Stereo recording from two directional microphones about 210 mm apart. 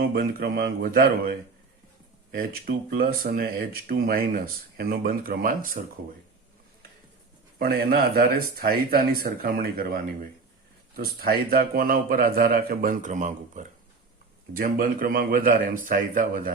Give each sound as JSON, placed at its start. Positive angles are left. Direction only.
{"t": 0.0, "sound": "speech", "side_deg": -45}
{"t": 2.3, "sound": "speech", "side_deg": -45}
{"t": 7.6, "sound": "a man's voice", "side_deg": -45}